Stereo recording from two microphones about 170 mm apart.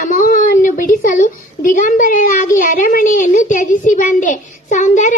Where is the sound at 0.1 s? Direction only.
55° left (ahead or behind).